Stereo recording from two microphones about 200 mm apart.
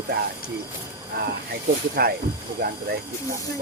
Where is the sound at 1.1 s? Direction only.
50° right (ahead or behind).